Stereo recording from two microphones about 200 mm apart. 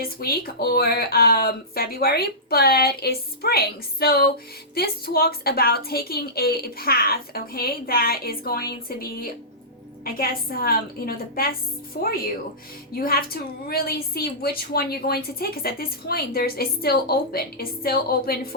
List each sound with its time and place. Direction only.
0.0 s a woman's voice: 50° left (ahead or behind)